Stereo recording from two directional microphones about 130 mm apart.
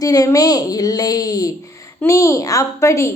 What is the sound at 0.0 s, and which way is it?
A woman's voice, 30° left (ahead or behind).